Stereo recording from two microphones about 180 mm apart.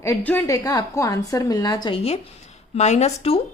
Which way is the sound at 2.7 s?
40° left (ahead or behind).